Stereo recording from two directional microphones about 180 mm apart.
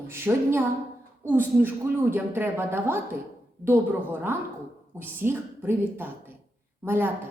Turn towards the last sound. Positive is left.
turn(degrees=-10)  # may be behind; listen again after turning